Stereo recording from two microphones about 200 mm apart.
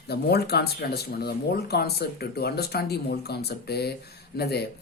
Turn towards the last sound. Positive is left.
turn(degrees=50)  # may be behind; listen again after turning